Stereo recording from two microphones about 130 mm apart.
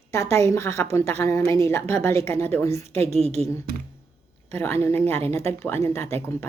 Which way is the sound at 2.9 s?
55° right (ahead or behind).